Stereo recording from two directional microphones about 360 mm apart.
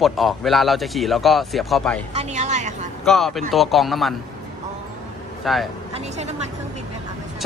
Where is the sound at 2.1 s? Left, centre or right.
Centre.